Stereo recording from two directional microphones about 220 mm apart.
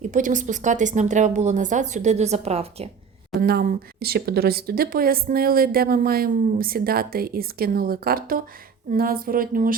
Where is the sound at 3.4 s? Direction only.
45° right (ahead or behind).